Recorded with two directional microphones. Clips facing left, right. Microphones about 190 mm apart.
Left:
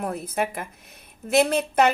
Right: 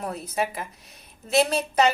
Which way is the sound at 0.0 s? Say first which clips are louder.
Left 2 dB; 55° left (ahead or behind).